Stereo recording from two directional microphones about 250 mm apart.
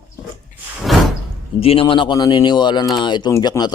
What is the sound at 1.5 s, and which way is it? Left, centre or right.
A man's voice, left.